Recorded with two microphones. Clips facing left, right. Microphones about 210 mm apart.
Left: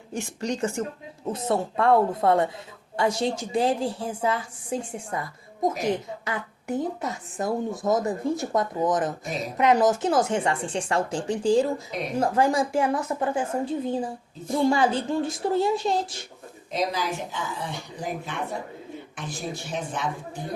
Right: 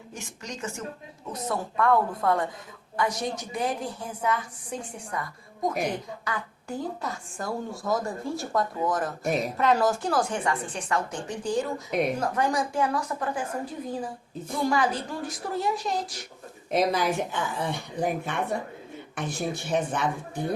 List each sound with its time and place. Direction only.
0.1 s a woman's voice: 30° left (ahead or behind)
6.2 s a woman's voice: 20° left (ahead or behind)
16.7 s speech: 55° right (ahead or behind)